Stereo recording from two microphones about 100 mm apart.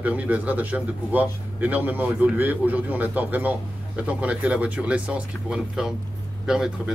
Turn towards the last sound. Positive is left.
turn(degrees=-5)  # may be behind; listen again after turning